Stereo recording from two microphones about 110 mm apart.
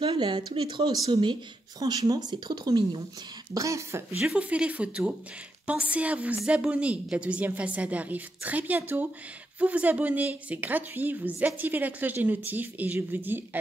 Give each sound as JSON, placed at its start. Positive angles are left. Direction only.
{"t": 0.0, "sound": "speech", "side_deg": -50}
{"t": 3.5, "sound": "speech", "side_deg": -30}
{"t": 4.2, "sound": "a woman's voice", "side_deg": -10}